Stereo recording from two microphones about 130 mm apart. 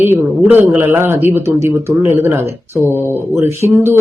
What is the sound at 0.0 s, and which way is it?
Speech, 15° right (ahead or behind).